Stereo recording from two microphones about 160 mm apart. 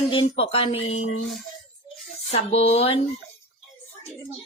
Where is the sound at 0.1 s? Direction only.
35° left (ahead or behind).